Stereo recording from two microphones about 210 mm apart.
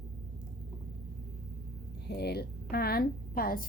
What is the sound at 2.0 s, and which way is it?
A woman's voice, 50° left (ahead or behind).